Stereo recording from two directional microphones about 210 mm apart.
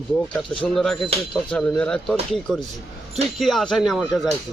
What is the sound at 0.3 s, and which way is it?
Speech, 5° left (ahead or behind).